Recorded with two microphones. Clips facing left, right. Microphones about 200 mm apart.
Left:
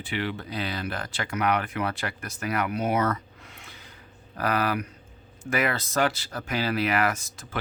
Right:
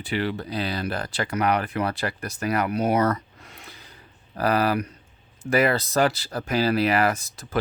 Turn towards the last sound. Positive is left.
turn(degrees=-35)  # may be behind; listen again after turning